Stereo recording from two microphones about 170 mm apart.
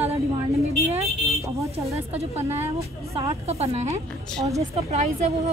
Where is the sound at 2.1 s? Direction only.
40° right (ahead or behind).